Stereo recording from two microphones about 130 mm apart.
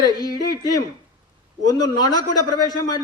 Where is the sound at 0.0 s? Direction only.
30° left (ahead or behind).